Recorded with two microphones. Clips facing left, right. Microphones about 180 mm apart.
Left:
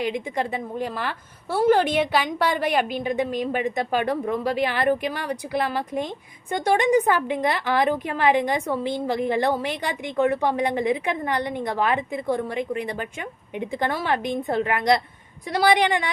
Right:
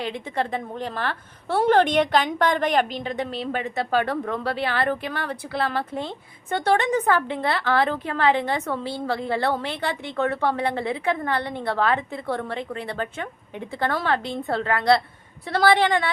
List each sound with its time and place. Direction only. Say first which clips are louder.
0.0 s a woman's voice: left 2 dB; 15° left (ahead or behind)